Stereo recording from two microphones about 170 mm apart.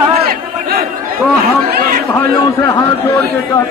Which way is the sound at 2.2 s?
15° left (ahead or behind).